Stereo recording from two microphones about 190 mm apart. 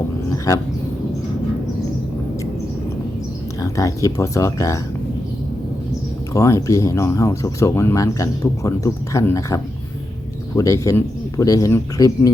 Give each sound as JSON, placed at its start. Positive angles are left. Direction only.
{"t": 0.5, "sound": "speech", "side_deg": 20}
{"t": 3.6, "sound": "speech", "side_deg": 15}
{"t": 6.3, "sound": "speech", "side_deg": 15}